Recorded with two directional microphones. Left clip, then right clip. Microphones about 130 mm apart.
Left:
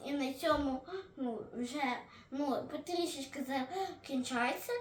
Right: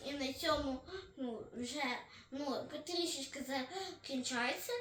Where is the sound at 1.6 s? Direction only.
45° left (ahead or behind).